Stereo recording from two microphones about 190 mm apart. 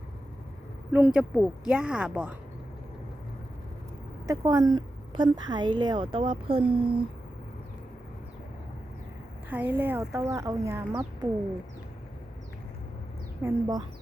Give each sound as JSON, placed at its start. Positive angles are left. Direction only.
{"t": 0.9, "sound": "a woman's voice", "side_deg": -5}
{"t": 4.3, "sound": "a woman's voice", "side_deg": -20}
{"t": 9.5, "sound": "speech", "side_deg": -10}
{"t": 13.4, "sound": "a woman's voice", "side_deg": -20}